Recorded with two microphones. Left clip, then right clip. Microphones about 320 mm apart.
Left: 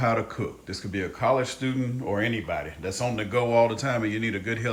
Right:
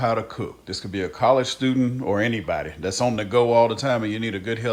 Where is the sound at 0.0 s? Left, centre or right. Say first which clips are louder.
Right 2 dB; centre.